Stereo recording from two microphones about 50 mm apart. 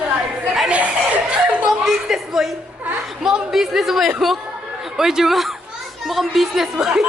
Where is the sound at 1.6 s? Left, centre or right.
Centre.